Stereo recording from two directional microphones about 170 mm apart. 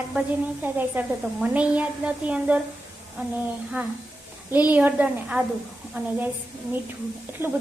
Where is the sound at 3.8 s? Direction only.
10° right (ahead or behind).